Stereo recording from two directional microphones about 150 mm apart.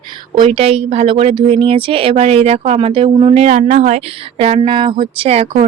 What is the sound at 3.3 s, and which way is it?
A woman's voice, 45° right (ahead or behind).